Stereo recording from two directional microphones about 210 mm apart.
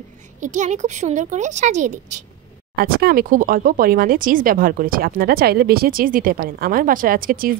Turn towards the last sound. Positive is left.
turn(degrees=-45)  # may be behind; listen again after turning